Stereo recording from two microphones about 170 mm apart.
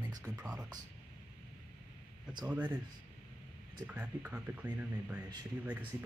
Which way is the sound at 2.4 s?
10° right (ahead or behind).